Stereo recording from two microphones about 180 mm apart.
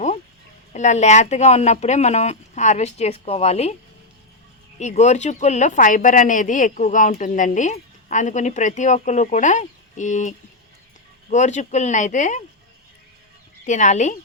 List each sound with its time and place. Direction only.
0.7 s speech: 40° left (ahead or behind)
4.8 s speech: 40° left (ahead or behind)
13.7 s speech: 40° left (ahead or behind)